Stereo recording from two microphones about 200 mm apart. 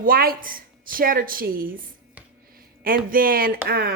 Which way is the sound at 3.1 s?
45° right (ahead or behind).